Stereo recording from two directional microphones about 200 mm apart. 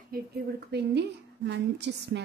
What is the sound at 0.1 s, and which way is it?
A woman's voice, 55° right (ahead or behind).